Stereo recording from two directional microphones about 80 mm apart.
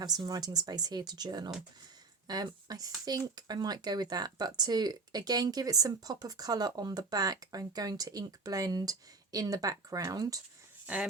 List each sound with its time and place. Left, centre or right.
0.0 s speech: right